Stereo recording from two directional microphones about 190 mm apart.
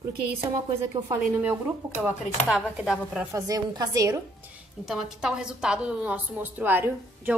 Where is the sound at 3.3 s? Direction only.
20° right (ahead or behind).